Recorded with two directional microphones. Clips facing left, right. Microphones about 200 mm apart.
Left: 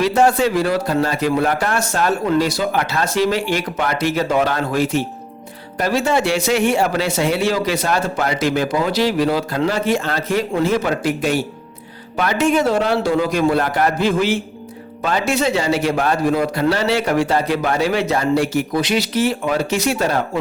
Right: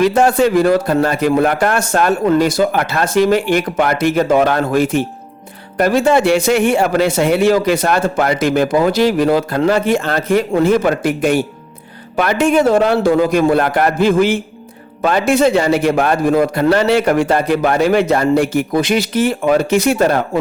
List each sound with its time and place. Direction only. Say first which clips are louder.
0.0 s speech: right 3 dB; 50° right (ahead or behind)